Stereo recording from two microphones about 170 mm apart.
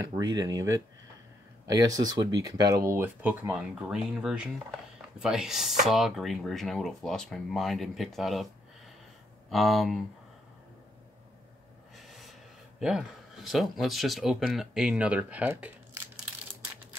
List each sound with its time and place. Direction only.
0.1 s speech: 25° right (ahead or behind); by 8.5 s centre (ahead or behind)
9.5 s speech: centre (ahead or behind)
12.0 s speech: centre (ahead or behind)